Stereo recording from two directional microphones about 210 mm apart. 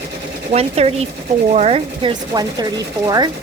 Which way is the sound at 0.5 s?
30° right (ahead or behind).